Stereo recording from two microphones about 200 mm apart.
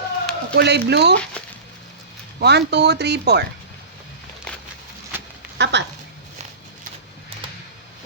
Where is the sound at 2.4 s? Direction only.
55° right (ahead or behind).